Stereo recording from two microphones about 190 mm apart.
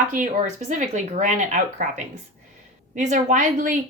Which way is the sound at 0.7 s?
40° right (ahead or behind).